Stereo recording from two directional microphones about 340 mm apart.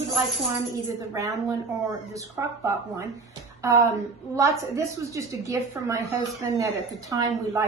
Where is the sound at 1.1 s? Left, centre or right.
Centre.